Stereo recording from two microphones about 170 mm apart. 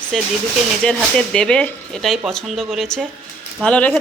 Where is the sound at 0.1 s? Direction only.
5° left (ahead or behind).